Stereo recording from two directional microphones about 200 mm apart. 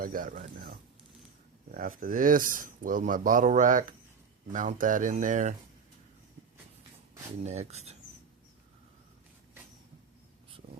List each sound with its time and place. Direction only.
0.0 s speech: 45° right (ahead or behind)
7.4 s speech: 35° right (ahead or behind)